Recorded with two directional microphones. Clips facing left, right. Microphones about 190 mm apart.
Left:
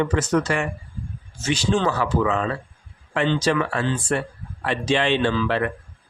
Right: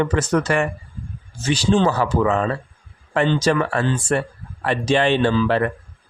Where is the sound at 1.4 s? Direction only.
35° right (ahead or behind).